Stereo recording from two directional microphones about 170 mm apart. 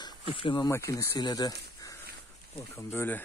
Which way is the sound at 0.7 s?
15° left (ahead or behind).